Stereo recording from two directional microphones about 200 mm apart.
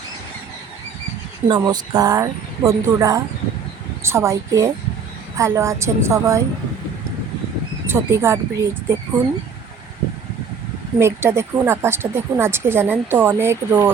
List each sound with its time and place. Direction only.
1.5 s speech: 20° right (ahead or behind)
7.9 s speech: 10° right (ahead or behind)
11.0 s speech: 15° right (ahead or behind)